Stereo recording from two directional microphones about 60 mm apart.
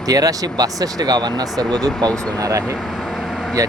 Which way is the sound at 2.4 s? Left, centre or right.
Right.